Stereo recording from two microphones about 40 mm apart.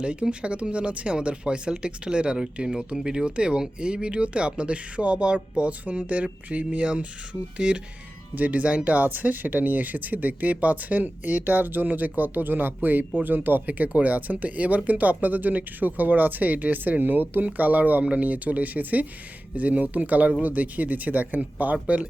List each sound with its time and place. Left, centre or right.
0.0 s speech: right
9.0 s speech: right
18.0 s speech: right
18.3 s speech: right